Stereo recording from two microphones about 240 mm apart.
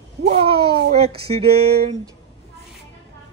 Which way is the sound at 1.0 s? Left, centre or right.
Right.